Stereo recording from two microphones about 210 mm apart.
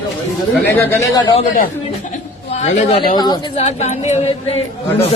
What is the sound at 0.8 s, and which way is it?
Speech, 10° left (ahead or behind).